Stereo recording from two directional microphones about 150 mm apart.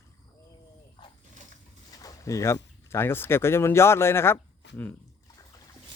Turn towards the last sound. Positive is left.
turn(degrees=15)  # may be behind; listen again after turning